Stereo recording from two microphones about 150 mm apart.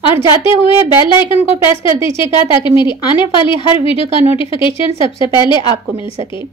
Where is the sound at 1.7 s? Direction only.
20° right (ahead or behind).